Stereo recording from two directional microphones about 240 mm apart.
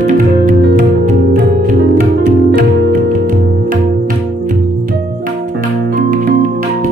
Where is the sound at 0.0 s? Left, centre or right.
Right.